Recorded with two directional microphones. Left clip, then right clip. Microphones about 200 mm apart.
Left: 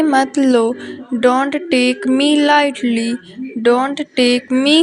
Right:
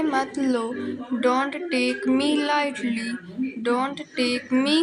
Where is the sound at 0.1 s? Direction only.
35° left (ahead or behind).